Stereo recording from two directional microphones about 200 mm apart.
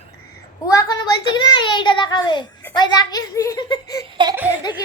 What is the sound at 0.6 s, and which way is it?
A child's voice, 20° left (ahead or behind).